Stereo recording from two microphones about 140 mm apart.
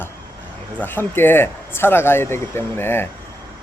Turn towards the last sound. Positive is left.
turn(degrees=15)  # may be behind; listen again after turning